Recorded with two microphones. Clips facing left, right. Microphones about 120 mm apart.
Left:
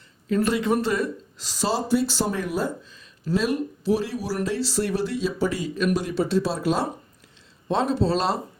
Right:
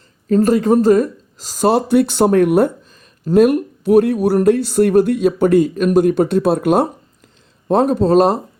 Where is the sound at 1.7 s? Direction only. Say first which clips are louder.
Right 9 dB; 60° right (ahead or behind).